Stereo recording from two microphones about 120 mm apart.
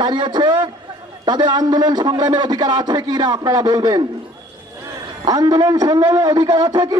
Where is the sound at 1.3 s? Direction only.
35° right (ahead or behind).